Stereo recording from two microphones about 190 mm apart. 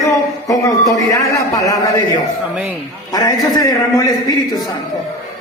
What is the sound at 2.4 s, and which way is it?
Speech, 5° right (ahead or behind).